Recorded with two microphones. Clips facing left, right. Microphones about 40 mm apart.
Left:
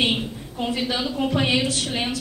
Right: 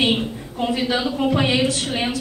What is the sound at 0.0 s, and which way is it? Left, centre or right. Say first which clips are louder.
A woman's voice: right 3 dB; centre.